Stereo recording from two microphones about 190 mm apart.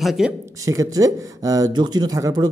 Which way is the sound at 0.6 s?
15° right (ahead or behind).